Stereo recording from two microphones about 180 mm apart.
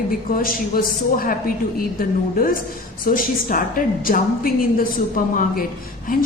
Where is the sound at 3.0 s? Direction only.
50° left (ahead or behind).